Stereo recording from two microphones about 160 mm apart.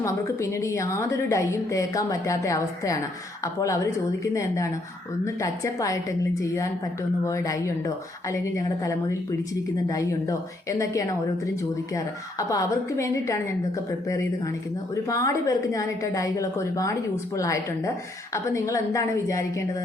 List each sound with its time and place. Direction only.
0.0 s a woman's voice: 20° left (ahead or behind)